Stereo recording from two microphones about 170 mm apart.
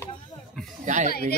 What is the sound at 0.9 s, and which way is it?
Speech, 45° right (ahead or behind).